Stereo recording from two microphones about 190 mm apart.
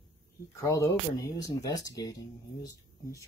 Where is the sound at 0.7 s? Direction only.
15° left (ahead or behind).